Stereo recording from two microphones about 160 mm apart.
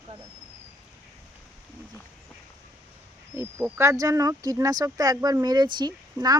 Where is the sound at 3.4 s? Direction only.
15° right (ahead or behind).